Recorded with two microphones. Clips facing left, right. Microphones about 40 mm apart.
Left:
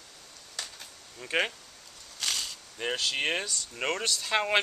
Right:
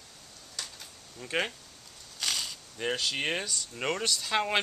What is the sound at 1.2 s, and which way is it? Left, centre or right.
Speech, centre.